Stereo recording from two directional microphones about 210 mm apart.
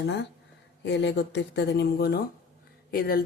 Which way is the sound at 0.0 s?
55° left (ahead or behind).